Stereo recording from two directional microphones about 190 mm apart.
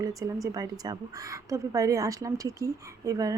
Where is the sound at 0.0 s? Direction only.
20° right (ahead or behind).